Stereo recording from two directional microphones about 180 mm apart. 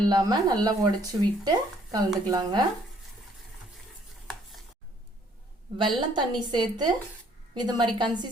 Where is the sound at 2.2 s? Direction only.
20° right (ahead or behind).